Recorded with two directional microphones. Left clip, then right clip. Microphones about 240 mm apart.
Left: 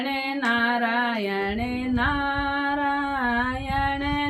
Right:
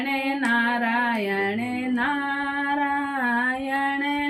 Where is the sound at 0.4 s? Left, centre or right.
Centre.